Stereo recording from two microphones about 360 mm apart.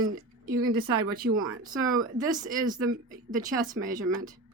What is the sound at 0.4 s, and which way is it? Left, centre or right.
Speech, centre.